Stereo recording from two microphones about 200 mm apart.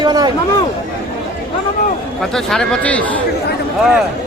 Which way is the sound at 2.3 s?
Centre (ahead or behind).